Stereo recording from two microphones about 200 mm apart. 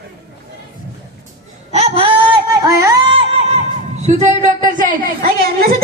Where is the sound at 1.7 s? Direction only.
30° right (ahead or behind).